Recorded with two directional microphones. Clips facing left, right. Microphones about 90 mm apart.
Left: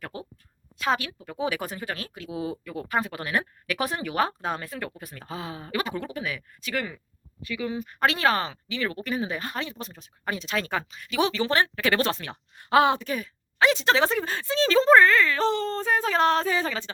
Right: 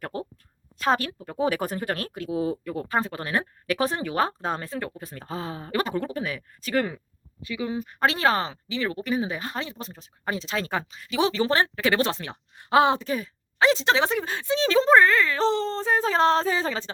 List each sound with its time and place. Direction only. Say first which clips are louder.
0.0 s a woman's voice: right 5 dB; 45° right (ahead or behind)
7.4 s speech: right 1 dB; 20° right (ahead or behind)
9.0 s speech: right 2 dB; 10° right (ahead or behind); by 11.7 s 35° right (ahead or behind)
11.7 s speech: right 1 dB; 20° right (ahead or behind)